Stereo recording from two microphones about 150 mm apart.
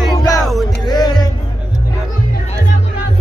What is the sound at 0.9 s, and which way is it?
Music, 25° left (ahead or behind).